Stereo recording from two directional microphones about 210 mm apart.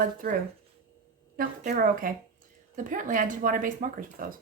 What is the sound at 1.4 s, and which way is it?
A woman's voice, 45° right (ahead or behind).